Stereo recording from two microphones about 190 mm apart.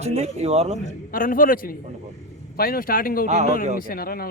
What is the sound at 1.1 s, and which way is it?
Speech, 50° left (ahead or behind).